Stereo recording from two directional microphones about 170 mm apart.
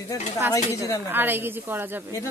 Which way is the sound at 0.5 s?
20° left (ahead or behind).